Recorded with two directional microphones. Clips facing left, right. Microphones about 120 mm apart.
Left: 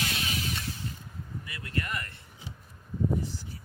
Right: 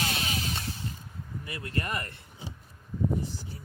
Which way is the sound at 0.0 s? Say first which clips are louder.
Right 1 dB; 30° right (ahead or behind).